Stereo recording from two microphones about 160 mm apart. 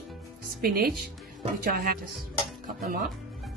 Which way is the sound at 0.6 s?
70° right (ahead or behind).